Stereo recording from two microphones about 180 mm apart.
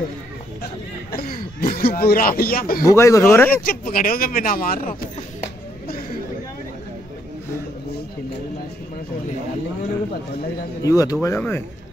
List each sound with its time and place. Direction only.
1.1 s speech: 55° left (ahead or behind)
2.8 s speech: 15° left (ahead or behind)
3.6 s speech: 50° left (ahead or behind)
10.8 s speech: 20° left (ahead or behind)
11.3 s speech: 10° left (ahead or behind)